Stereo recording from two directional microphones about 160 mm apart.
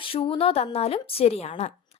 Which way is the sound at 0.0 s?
35° left (ahead or behind).